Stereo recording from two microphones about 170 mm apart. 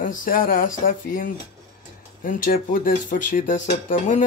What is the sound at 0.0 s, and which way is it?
Speech, 55° left (ahead or behind).